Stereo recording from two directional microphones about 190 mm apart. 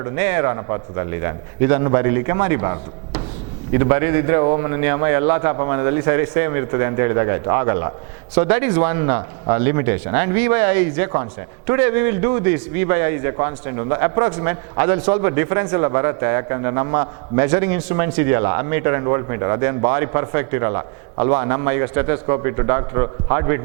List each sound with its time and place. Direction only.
0.0 s a man's voice: 15° right (ahead or behind)